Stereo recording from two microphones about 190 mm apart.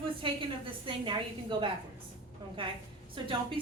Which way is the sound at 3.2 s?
25° right (ahead or behind).